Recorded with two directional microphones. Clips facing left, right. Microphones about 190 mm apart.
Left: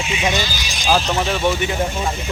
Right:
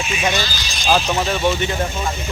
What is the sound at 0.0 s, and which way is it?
Speech, 20° left (ahead or behind).